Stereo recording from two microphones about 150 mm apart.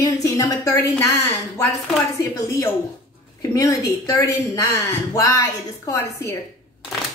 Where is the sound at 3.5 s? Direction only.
20° left (ahead or behind).